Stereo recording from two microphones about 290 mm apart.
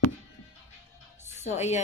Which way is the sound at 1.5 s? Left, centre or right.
Left.